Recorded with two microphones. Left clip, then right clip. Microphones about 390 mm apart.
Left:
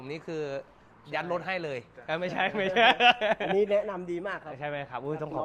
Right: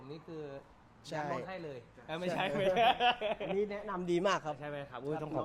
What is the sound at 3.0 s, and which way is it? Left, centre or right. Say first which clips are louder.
Speech: left 9 dB; left.